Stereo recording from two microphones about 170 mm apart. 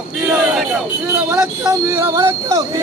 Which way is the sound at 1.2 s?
15° right (ahead or behind).